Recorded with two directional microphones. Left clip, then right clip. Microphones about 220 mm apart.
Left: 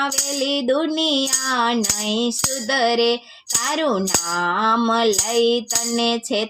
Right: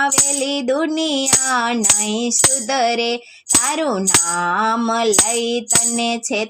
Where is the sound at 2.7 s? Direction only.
25° right (ahead or behind).